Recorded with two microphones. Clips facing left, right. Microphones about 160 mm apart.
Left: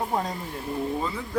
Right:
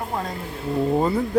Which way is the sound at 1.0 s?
45° right (ahead or behind).